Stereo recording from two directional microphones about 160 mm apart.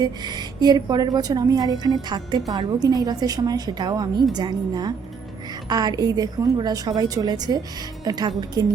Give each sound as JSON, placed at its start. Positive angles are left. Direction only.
{"t": 0.0, "sound": "a woman's voice", "side_deg": -25}